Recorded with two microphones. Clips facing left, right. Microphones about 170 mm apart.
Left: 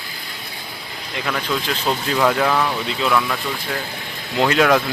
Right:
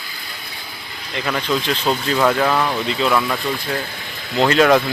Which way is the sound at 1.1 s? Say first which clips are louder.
Right 3 dB; 5° right (ahead or behind).